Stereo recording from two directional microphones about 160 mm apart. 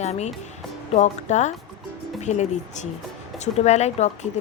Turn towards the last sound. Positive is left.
turn(degrees=45)  # may be behind; listen again after turning